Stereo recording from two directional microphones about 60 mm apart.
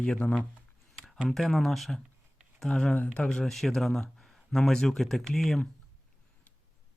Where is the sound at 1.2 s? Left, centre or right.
Centre.